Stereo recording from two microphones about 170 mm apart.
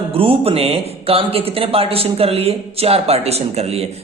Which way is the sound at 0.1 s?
35° right (ahead or behind).